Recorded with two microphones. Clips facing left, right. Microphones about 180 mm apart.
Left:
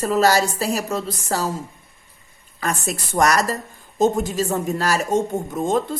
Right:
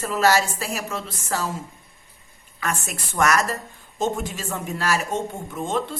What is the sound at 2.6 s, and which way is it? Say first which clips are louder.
A woman's voice: left 4 dB; 35° left (ahead or behind).